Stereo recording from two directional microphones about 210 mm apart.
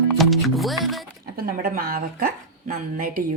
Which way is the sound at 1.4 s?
45° right (ahead or behind).